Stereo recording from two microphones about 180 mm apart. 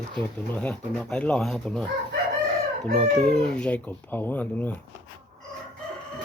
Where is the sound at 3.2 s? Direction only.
5° left (ahead or behind).